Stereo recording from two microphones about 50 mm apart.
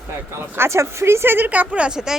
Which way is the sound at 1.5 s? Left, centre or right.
Right.